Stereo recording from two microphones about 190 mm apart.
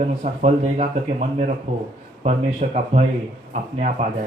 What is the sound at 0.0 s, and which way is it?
Speech, 35° right (ahead or behind).